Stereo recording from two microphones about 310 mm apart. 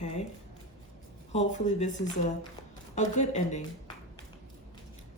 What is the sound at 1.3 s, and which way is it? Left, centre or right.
Speech, left.